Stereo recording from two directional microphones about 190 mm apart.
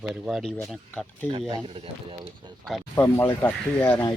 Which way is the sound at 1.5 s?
30° right (ahead or behind).